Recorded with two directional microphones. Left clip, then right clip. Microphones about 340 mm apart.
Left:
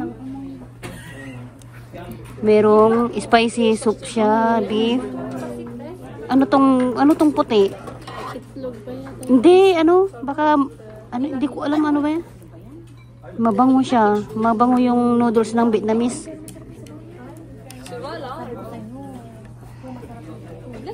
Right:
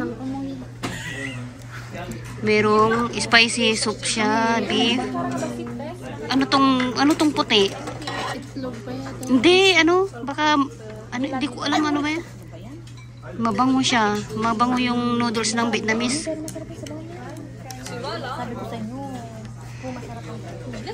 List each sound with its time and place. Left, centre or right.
2.4 s speech: centre
6.3 s speech: centre
9.3 s speech: centre
13.4 s speech: centre
18.0 s chatter: left